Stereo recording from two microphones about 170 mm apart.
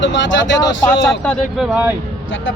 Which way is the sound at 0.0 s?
90° left.